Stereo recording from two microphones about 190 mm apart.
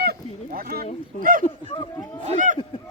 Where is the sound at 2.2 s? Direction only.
40° right (ahead or behind).